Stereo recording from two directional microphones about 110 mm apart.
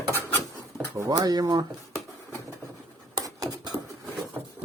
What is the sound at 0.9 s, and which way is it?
Speech, 30° right (ahead or behind).